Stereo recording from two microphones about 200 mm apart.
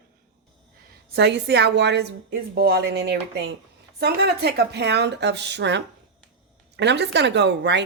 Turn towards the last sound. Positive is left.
turn(degrees=-60)  # may be behind; listen again after turning